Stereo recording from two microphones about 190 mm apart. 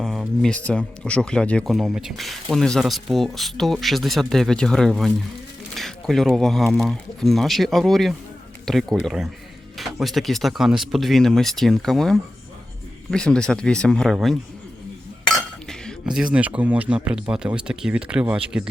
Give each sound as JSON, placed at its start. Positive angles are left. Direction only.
{"t": 0.0, "sound": "speech", "side_deg": 0}
{"t": 15.6, "sound": "speech", "side_deg": 5}